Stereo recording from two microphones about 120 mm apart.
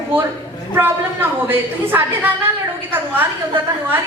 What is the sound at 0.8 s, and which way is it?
A woman's voice, 15° right (ahead or behind).